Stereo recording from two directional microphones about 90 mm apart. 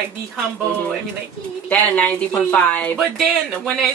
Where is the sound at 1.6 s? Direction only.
15° left (ahead or behind).